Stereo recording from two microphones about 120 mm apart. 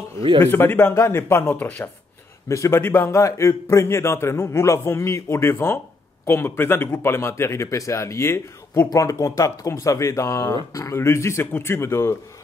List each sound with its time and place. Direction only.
0.4 s speech: 20° left (ahead or behind)
2.4 s speech: 25° left (ahead or behind)